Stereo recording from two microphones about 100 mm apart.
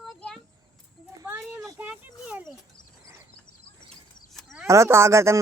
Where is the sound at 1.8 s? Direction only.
15° right (ahead or behind).